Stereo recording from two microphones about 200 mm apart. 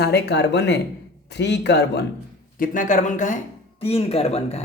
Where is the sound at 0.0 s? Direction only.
55° left (ahead or behind).